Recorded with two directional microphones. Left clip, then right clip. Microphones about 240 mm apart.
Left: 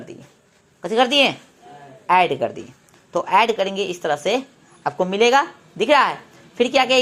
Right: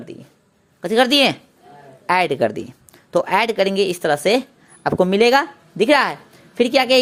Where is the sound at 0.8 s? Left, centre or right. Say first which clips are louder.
Right 1 dB; right.